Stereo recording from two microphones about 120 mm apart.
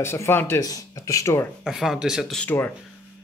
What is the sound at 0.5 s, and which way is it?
Speech, 30° left (ahead or behind).